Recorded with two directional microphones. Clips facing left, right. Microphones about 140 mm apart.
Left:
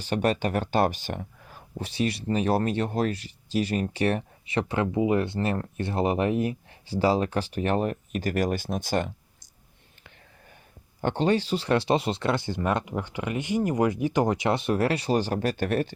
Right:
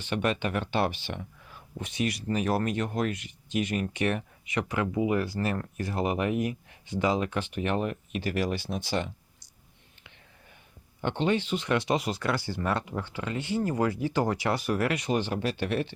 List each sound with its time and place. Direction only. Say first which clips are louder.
0.0 s speech: left 3 dB; 40° left (ahead or behind)
11.0 s speech: left 3 dB; 40° left (ahead or behind)